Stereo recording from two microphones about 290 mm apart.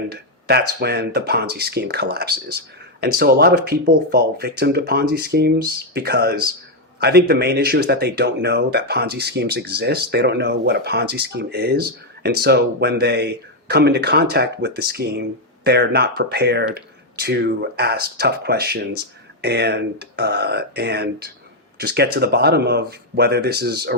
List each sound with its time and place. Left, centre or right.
0.1 s speech: right